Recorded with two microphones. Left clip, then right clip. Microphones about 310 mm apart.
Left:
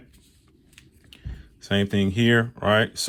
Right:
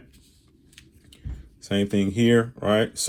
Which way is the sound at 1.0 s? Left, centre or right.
Left.